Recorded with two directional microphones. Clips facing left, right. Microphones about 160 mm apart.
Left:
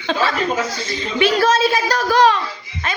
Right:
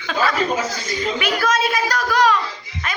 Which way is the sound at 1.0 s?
30° left (ahead or behind).